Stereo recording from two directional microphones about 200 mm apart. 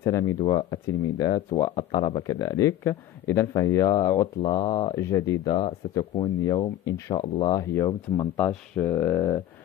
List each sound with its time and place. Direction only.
0.0 s speech: 15° left (ahead or behind)